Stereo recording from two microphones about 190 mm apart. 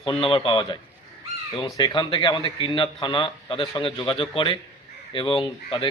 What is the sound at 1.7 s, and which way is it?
Speech, 25° left (ahead or behind).